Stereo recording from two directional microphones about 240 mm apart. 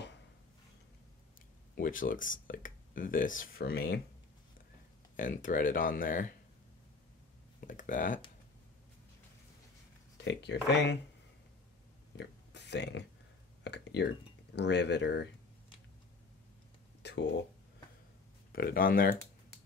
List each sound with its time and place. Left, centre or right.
1.8 s speech: left
5.1 s speech: left
7.6 s speech: left
10.1 s speech: left
12.2 s a sound: left
13.7 s speech: left
17.0 s a sound: left
18.5 s speech: left